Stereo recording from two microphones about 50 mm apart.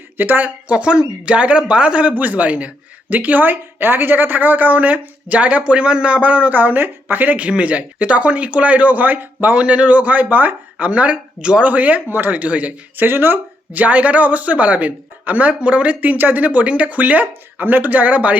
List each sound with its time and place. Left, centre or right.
0.2 s speech: right
7.3 s speech: right
13.1 s speech: right
13.7 s speech: right